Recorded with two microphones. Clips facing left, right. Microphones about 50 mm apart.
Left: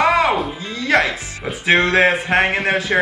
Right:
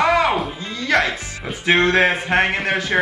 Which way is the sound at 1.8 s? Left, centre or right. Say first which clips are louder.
Even; centre.